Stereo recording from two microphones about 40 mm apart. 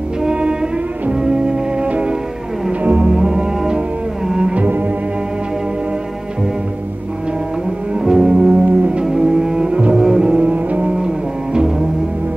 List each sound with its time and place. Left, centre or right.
0.2 s music: right
3.1 s music: centre
4.3 s cello: right
4.6 s cello: right
7.9 s cello: centre
8.6 s music: right
9.0 s cello: centre
9.9 s double bass: centre
10.8 s music: right